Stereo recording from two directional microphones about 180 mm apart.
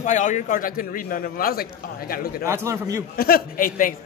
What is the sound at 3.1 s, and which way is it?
Speech, 55° left (ahead or behind).